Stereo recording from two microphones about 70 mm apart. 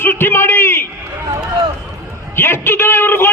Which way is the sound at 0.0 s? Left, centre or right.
Left.